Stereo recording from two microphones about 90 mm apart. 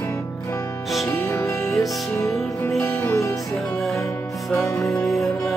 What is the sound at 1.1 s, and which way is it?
Music, 30° left (ahead or behind).